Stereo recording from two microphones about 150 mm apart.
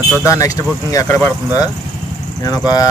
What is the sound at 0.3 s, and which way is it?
Speech, 20° left (ahead or behind).